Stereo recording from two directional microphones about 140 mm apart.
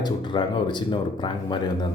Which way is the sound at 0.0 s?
35° left (ahead or behind).